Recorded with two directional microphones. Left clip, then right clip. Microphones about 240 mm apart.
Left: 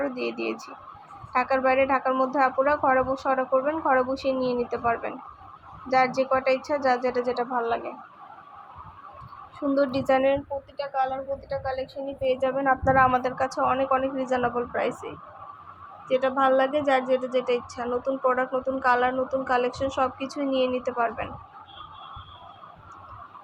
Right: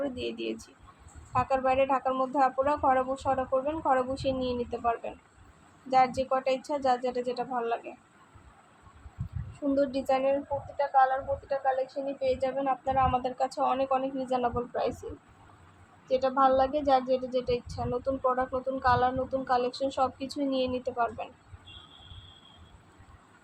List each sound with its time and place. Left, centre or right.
0.0 s a woman's voice: centre
9.7 s a woman's voice: centre
16.0 s a woman's voice: centre